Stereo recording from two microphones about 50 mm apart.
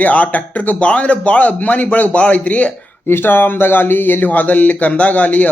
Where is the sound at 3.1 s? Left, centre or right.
Left.